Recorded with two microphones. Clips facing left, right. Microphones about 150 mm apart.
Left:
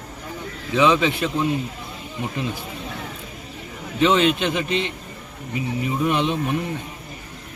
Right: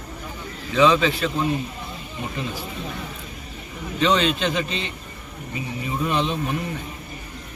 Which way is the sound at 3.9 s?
15° left (ahead or behind).